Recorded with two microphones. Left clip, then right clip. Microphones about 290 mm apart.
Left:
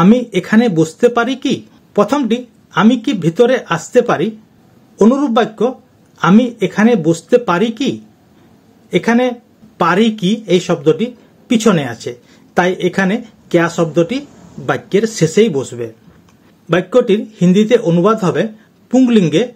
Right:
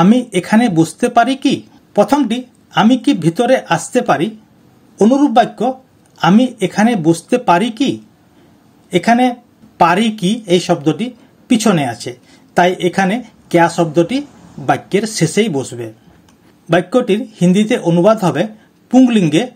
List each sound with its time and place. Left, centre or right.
0.0 s speech: right